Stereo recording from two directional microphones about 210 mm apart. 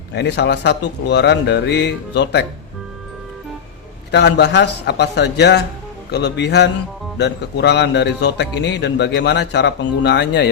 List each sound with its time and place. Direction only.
0.1 s speech: 55° left (ahead or behind)
4.1 s a man's voice: 55° left (ahead or behind)